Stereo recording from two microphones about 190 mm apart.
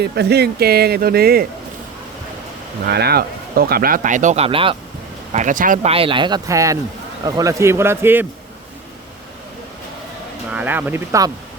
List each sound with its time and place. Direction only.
0.0 s speech: 60° right (ahead or behind)
2.8 s speech: 55° right (ahead or behind); by 4.8 s 30° right (ahead or behind)
5.3 s speech: 40° right (ahead or behind)
5.9 s a man's voice: 30° right (ahead or behind); by 8.3 s 10° right (ahead or behind)
10.5 s a man's voice: 10° right (ahead or behind)